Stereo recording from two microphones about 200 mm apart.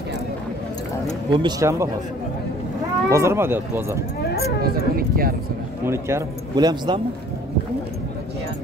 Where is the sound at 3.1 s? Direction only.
15° right (ahead or behind).